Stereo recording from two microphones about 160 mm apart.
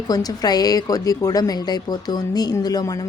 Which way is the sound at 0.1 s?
25° left (ahead or behind).